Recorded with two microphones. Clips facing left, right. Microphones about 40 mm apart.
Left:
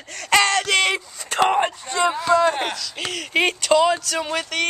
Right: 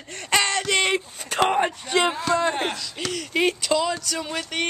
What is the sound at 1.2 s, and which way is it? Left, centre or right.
Speech, left.